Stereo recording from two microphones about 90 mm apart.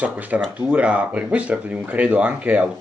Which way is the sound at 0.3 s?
15° right (ahead or behind).